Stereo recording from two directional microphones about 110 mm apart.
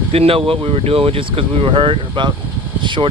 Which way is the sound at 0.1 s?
60° right (ahead or behind).